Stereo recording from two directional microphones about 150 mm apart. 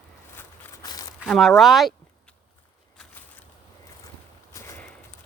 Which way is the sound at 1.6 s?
Centre (ahead or behind).